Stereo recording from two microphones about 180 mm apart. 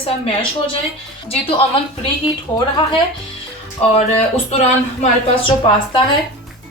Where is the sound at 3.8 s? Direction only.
35° left (ahead or behind).